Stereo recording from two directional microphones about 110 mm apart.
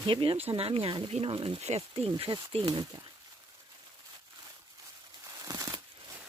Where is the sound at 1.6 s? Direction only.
75° right (ahead or behind).